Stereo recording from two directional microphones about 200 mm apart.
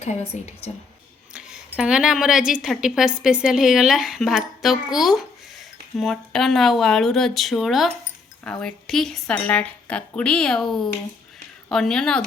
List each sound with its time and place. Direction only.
0.0 s a woman's voice: 30° left (ahead or behind)
1.3 s a woman's voice: 5° right (ahead or behind)